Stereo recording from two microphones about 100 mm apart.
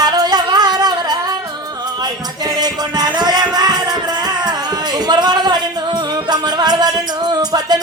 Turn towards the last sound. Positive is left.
turn(degrees=-45)  # may be behind; listen again after turning